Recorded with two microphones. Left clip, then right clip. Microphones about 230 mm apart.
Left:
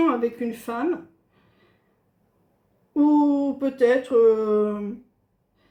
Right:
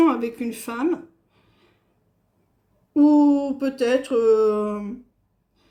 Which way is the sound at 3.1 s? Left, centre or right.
Right.